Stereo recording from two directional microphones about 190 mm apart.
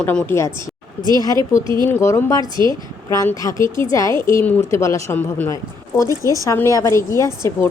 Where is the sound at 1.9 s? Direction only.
15° left (ahead or behind).